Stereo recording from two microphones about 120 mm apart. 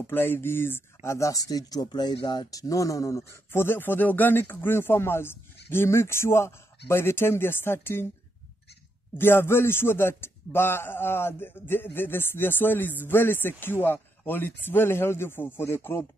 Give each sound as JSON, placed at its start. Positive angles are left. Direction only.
{"t": 0.0, "sound": "speech", "side_deg": 15}
{"t": 9.2, "sound": "a man's voice", "side_deg": 20}